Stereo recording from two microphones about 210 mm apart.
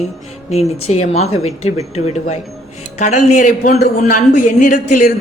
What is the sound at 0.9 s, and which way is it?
A man's voice, 30° left (ahead or behind).